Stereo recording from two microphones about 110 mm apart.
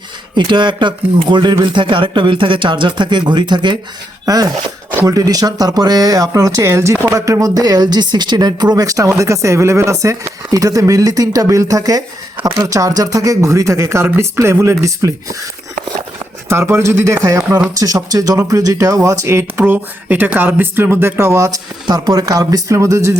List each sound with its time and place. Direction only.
0.3 s speech: 45° right (ahead or behind)
4.3 s speech: 35° right (ahead or behind)
16.5 s speech: 25° right (ahead or behind)